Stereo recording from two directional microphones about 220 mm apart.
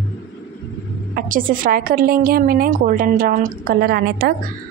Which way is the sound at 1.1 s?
40° right (ahead or behind).